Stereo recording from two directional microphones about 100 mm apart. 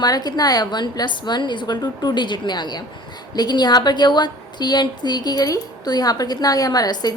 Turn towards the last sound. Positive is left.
turn(degrees=40)  # may be behind; listen again after turning